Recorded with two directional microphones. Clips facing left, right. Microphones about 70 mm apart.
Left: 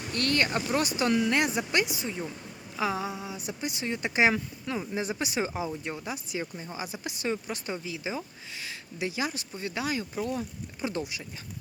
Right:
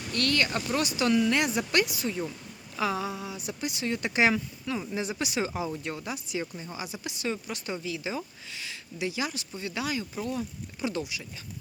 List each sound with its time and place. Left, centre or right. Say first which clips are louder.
0.1 s speech: even; left
9.0 s speech: even; left